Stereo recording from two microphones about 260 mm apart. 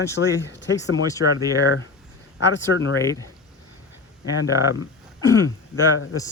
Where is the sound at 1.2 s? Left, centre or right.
Centre.